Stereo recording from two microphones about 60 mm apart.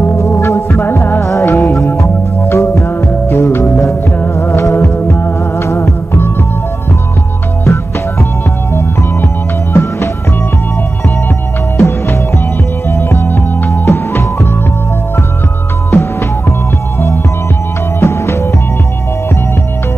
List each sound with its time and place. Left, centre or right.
0.2 s music: left
1.2 s music: left
4.9 s music: left
7.6 s music: left
11.7 s music: left
15.9 s music: left
18.0 s music: left